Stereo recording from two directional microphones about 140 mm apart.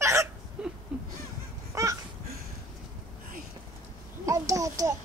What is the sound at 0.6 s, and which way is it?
Whimper, 5° right (ahead or behind).